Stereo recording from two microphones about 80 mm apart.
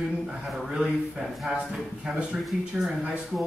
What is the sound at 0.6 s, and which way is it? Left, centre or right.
Speech, centre.